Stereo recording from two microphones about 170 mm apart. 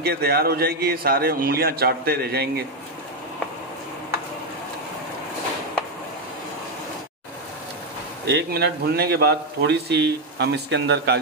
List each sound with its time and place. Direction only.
0.0 s a man's voice: 65° right (ahead or behind)
8.3 s a man's voice: 85° right